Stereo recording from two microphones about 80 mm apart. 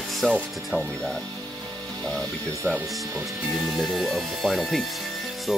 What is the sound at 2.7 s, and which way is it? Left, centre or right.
Speech, centre.